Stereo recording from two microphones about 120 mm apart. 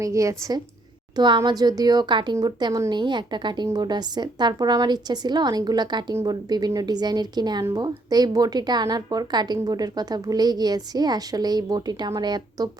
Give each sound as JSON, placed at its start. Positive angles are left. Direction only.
{"t": 0.0, "sound": "a woman's voice", "side_deg": -25}
{"t": 1.1, "sound": "a woman's voice", "side_deg": -40}